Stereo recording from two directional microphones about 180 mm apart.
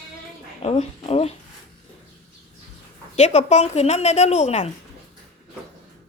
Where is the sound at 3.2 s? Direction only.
40° left (ahead or behind).